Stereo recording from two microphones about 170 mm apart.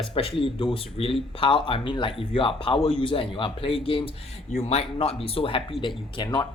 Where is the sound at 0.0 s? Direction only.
35° left (ahead or behind).